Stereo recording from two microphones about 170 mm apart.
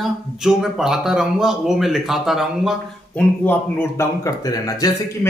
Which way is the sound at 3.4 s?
15° left (ahead or behind).